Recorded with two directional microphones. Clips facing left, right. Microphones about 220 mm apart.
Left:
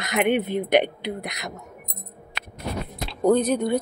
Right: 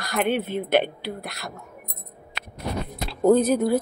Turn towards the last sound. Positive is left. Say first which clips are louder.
# right 2 dB
turn(degrees=-5)  # may be behind; listen again after turning